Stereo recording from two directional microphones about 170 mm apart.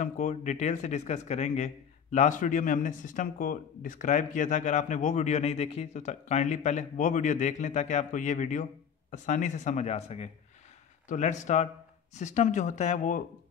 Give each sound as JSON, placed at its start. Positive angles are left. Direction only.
{"t": 0.0, "sound": "a man's voice", "side_deg": 45}